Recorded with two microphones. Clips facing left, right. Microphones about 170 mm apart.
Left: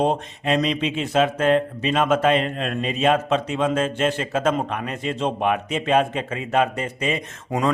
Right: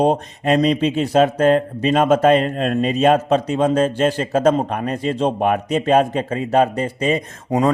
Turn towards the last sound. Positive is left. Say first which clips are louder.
# right 5 dB
turn(degrees=-35)  # may be behind; listen again after turning